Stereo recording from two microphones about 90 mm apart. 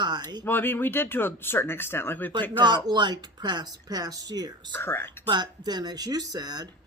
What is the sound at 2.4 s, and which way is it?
Speech, 55° right (ahead or behind).